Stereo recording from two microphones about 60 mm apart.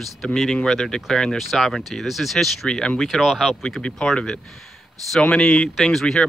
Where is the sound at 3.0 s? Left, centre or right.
Centre.